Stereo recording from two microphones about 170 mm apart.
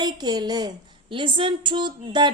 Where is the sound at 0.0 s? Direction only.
25° right (ahead or behind).